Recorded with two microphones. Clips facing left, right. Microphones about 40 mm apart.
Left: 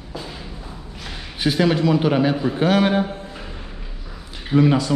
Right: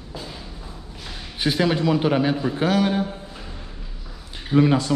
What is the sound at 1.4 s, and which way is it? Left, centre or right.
A man's voice, centre.